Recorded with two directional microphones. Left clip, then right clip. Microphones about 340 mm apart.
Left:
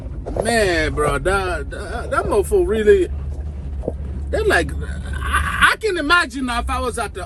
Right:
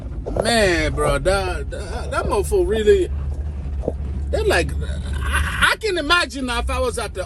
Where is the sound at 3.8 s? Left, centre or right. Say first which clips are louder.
Right 1 dB; centre.